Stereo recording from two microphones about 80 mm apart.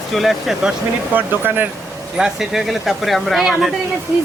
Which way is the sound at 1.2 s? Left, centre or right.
Right.